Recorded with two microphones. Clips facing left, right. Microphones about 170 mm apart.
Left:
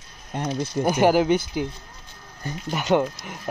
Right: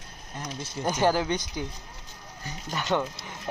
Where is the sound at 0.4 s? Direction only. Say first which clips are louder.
Left 10 dB; 60° left (ahead or behind).